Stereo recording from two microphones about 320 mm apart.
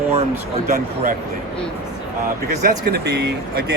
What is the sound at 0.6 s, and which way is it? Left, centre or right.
Speech, right.